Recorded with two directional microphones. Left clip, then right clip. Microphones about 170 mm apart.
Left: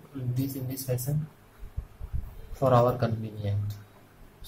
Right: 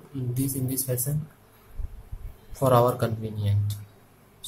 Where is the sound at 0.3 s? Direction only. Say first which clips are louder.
Right 4 dB; 25° right (ahead or behind).